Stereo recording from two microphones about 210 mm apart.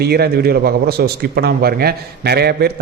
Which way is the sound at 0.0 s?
50° right (ahead or behind).